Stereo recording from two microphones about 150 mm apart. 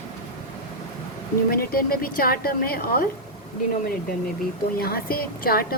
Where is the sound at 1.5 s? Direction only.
80° left.